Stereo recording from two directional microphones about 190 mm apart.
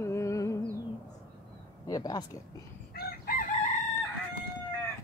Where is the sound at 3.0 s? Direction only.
50° left (ahead or behind).